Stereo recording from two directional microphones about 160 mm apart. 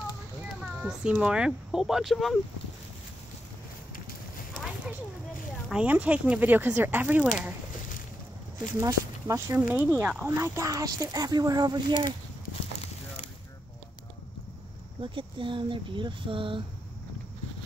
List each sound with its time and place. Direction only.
0.7 s speech: 5° right (ahead or behind)
4.6 s a sound: 5° right (ahead or behind)
5.7 s speech: 10° right (ahead or behind)
8.7 s speech: 20° right (ahead or behind)
15.0 s speech: 30° right (ahead or behind)